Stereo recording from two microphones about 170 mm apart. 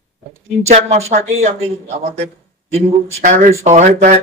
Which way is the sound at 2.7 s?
45° right (ahead or behind).